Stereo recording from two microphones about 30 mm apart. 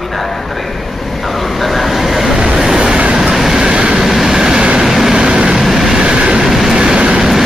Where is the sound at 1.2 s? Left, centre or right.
Centre.